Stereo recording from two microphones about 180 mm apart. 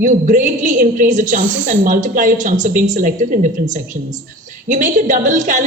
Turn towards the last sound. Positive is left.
turn(degrees=-45)  # may be behind; listen again after turning